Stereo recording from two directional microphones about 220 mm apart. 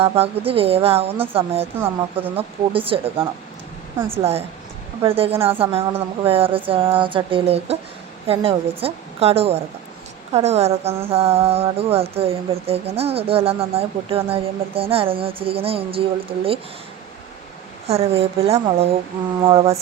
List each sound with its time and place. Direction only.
0.0 s music: 25° right (ahead or behind)
17.8 s music: 25° right (ahead or behind)